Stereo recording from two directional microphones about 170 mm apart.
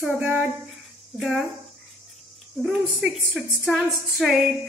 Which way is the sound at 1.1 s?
Centre (ahead or behind).